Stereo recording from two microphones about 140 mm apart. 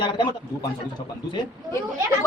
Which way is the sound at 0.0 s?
35° left (ahead or behind).